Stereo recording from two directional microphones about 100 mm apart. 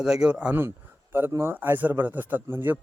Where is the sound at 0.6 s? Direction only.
20° right (ahead or behind).